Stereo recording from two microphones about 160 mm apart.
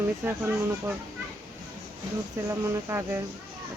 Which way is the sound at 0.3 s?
10° right (ahead or behind).